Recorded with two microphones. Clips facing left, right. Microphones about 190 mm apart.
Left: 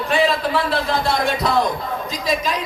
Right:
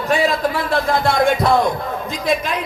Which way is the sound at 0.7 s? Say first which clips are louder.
Right 3 dB; 50° right (ahead or behind).